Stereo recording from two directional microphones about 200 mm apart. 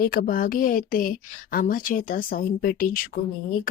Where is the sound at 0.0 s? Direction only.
45° left (ahead or behind).